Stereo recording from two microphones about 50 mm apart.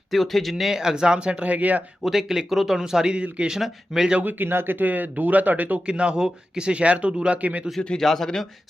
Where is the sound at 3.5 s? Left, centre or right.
Centre.